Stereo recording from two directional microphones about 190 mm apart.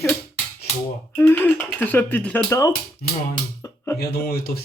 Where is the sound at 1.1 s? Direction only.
10° left (ahead or behind).